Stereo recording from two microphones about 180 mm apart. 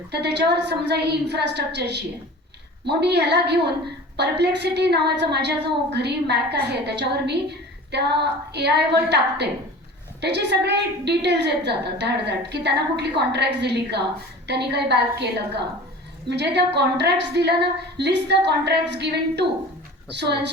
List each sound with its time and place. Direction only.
0.1 s a woman's voice: 70° right (ahead or behind)